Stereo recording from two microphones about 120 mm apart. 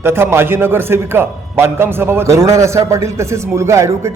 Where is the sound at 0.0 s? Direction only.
20° right (ahead or behind).